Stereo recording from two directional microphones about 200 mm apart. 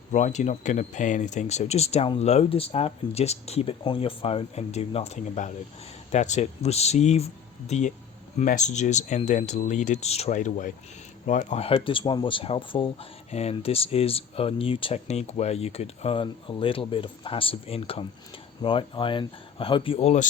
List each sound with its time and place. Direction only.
0.1 s speech: 35° left (ahead or behind)